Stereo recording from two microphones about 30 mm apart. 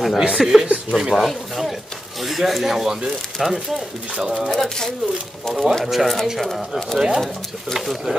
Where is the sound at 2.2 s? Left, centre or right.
Centre.